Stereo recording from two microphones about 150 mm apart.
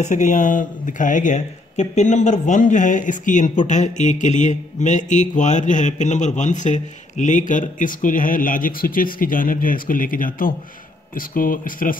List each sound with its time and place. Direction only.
0.0 s speech: 55° left (ahead or behind)